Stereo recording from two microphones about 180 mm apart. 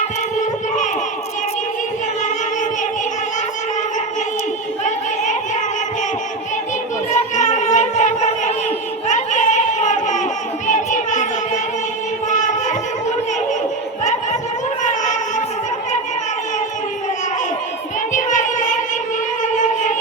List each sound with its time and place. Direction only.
7.1 s music: 40° left (ahead or behind)
9.0 s a sound: 40° left (ahead or behind)
18.1 s child singing: 45° left (ahead or behind)